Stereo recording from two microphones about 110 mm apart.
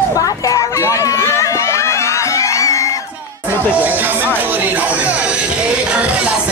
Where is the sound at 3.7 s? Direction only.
15° right (ahead or behind).